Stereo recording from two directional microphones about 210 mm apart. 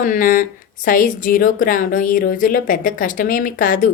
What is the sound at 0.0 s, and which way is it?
Speech, 40° left (ahead or behind).